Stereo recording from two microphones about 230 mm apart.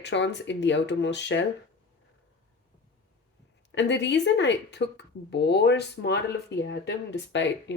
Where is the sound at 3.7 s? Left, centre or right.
Left.